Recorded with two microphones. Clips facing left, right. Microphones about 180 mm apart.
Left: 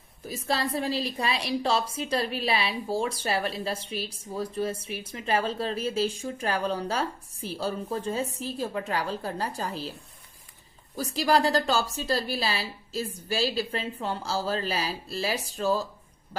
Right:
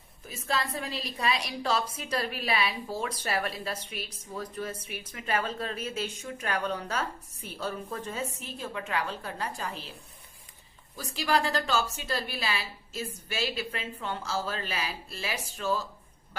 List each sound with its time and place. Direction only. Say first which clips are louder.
0.3 s a woman's voice: left 3 dB; 35° left (ahead or behind)
10.9 s a woman's voice: left 4 dB; 35° left (ahead or behind)